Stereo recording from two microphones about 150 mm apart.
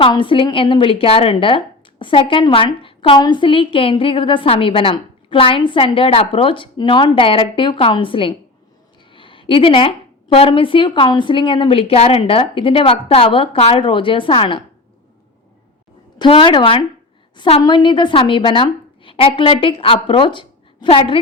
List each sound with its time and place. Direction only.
0.0 s a woman's voice: 35° left (ahead or behind)
16.1 s a woman's voice: 35° left (ahead or behind)